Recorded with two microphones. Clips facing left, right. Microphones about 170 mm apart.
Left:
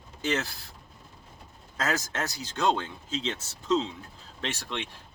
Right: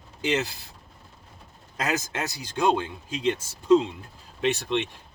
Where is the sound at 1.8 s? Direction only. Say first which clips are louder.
Right 2 dB; 15° right (ahead or behind).